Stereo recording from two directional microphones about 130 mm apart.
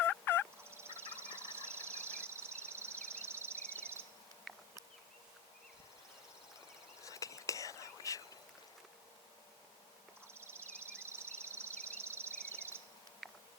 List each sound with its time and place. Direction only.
0.0 s fowl: 15° left (ahead or behind)
0.7 s a sound: 20° right (ahead or behind)
7.0 s whispering: 25° left (ahead or behind)
10.3 s insect: 20° right (ahead or behind)